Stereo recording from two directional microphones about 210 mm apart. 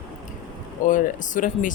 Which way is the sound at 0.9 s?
40° left (ahead or behind).